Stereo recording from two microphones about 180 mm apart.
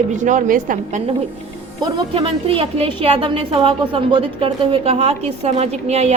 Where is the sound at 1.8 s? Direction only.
25° right (ahead or behind).